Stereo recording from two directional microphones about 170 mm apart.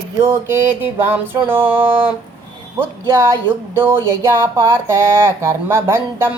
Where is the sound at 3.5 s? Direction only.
10° right (ahead or behind).